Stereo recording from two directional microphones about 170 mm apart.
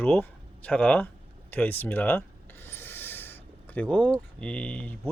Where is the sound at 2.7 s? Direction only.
10° left (ahead or behind).